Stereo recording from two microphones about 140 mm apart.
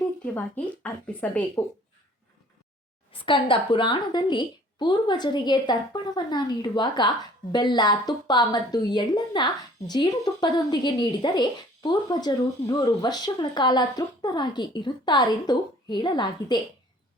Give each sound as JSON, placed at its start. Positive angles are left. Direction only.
{"t": 0.3, "sound": "a woman's voice", "side_deg": 10}
{"t": 3.1, "sound": "a woman's voice", "side_deg": 40}